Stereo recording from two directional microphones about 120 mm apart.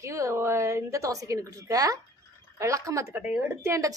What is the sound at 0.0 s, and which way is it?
Speech, 25° right (ahead or behind).